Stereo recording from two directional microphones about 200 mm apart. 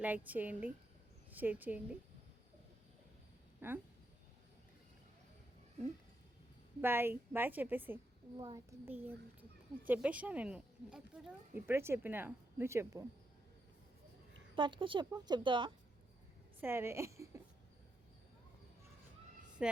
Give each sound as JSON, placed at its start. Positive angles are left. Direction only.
{"t": 0.3, "sound": "speech", "side_deg": -10}
{"t": 3.6, "sound": "speech", "side_deg": -10}
{"t": 6.8, "sound": "speech", "side_deg": -10}
{"t": 8.4, "sound": "speech", "side_deg": -25}
{"t": 8.9, "sound": "speech", "side_deg": -10}
{"t": 14.5, "sound": "speech", "side_deg": -25}
{"t": 16.6, "sound": "a woman's voice", "side_deg": -10}
{"t": 19.6, "sound": "a woman's voice", "side_deg": -5}